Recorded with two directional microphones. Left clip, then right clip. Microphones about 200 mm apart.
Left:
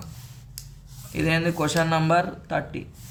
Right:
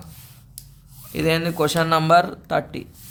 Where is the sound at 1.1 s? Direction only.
40° right (ahead or behind).